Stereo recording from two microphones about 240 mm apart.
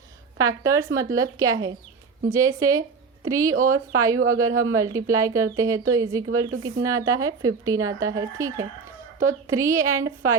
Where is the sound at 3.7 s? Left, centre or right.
Right.